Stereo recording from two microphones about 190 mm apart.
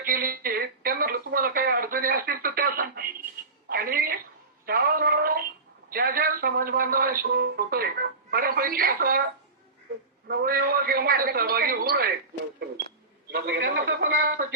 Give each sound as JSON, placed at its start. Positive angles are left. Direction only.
{"t": 0.0, "sound": "speech", "side_deg": -50}
{"t": 3.7, "sound": "telephone", "side_deg": -50}
{"t": 4.6, "sound": "a sound", "side_deg": -50}
{"t": 5.9, "sound": "a man's voice", "side_deg": -50}
{"t": 10.2, "sound": "a man's voice", "side_deg": -50}
{"t": 13.3, "sound": "a man's voice", "side_deg": -55}